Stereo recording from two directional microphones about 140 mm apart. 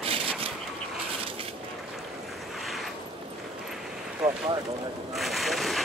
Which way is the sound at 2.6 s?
Centre (ahead or behind).